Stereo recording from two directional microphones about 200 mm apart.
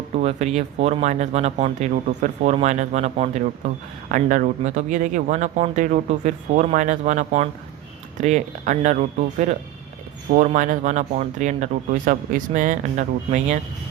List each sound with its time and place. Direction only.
0.2 s speech: 35° right (ahead or behind)